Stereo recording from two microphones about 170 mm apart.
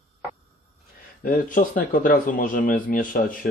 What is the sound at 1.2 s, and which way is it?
Speech, 55° left (ahead or behind).